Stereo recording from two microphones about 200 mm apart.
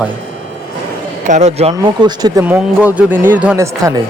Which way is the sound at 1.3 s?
35° right (ahead or behind).